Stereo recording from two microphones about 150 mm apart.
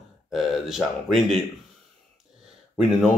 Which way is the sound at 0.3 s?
Centre (ahead or behind).